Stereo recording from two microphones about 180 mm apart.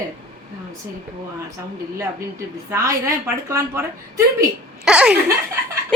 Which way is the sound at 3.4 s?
15° right (ahead or behind).